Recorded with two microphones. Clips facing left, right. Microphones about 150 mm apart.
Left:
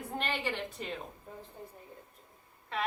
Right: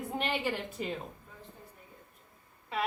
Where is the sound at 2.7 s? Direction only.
5° right (ahead or behind).